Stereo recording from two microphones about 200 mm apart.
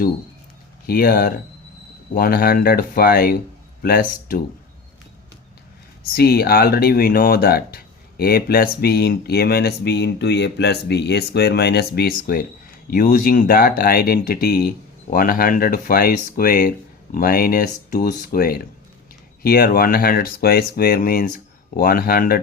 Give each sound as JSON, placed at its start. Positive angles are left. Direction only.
{"t": 0.9, "sound": "speech", "side_deg": 50}
{"t": 6.1, "sound": "speech", "side_deg": 50}